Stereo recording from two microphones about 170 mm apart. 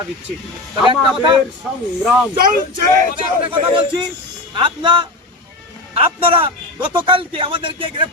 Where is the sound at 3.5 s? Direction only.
30° right (ahead or behind).